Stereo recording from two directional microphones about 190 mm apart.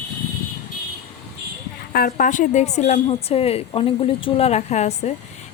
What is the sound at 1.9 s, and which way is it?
A woman's voice, 50° left (ahead or behind).